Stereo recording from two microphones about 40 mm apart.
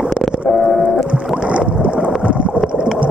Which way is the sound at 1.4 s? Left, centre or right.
Right.